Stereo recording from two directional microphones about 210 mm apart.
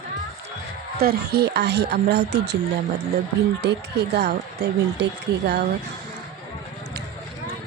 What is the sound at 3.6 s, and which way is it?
Speech, 50° right (ahead or behind).